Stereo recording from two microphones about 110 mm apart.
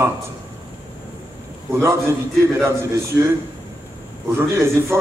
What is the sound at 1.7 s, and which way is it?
Speech, 25° right (ahead or behind).